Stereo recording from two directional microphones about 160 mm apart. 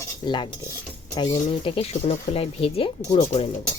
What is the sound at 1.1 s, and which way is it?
A woman's voice, 30° left (ahead or behind).